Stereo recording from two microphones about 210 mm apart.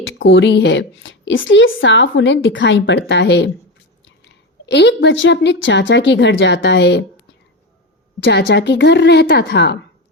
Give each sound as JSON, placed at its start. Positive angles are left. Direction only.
{"t": 0.0, "sound": "a woman's voice", "side_deg": 65}
{"t": 8.2, "sound": "a woman's voice", "side_deg": 55}